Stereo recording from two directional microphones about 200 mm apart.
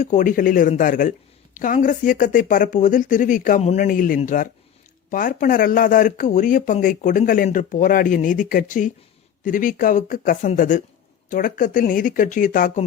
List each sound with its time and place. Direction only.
0.0 s speech: 40° left (ahead or behind)